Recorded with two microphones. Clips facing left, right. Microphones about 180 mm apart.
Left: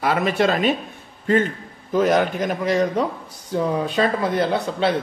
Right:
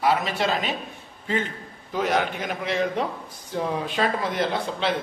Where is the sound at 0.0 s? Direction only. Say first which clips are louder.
Left 4 dB; 55° left (ahead or behind).